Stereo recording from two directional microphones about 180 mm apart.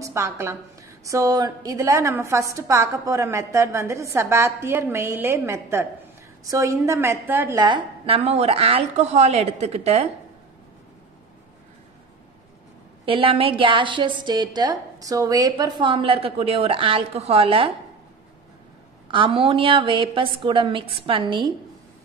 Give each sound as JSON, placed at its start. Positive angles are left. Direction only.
{"t": 0.0, "sound": "a woman's voice", "side_deg": -15}
{"t": 7.6, "sound": "a woman's voice", "side_deg": -30}
{"t": 13.0, "sound": "a woman's voice", "side_deg": -30}
{"t": 19.0, "sound": "a woman's voice", "side_deg": -30}